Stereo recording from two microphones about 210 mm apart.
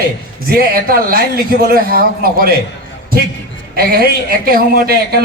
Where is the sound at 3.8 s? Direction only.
45° right (ahead or behind).